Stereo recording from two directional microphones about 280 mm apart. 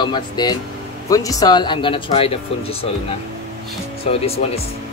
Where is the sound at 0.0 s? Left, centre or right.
Centre.